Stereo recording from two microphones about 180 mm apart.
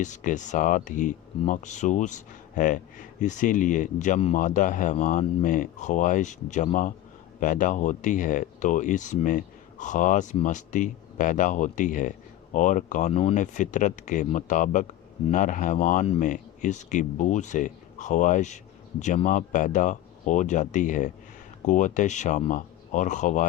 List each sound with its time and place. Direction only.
0.0 s speech: 45° left (ahead or behind)